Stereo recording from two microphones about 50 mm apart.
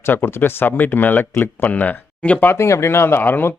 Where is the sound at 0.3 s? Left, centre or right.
Left.